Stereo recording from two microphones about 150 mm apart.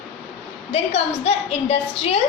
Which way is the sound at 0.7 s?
45° left (ahead or behind).